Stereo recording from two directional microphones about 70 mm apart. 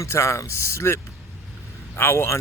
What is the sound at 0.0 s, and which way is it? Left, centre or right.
Speech, left.